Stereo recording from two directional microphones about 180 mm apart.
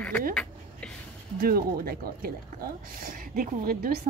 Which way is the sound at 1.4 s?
55° right (ahead or behind).